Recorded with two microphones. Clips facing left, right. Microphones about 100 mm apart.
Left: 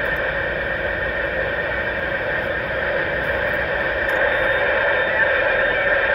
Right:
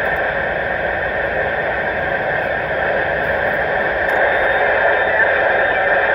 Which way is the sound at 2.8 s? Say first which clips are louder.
Right 5 dB; 45° right (ahead or behind).